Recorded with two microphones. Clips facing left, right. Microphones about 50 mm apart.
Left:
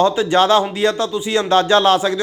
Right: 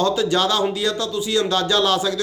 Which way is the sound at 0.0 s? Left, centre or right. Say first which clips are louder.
Left 5 dB; left.